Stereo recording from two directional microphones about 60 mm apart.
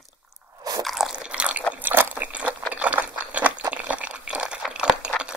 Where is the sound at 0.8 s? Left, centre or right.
Centre.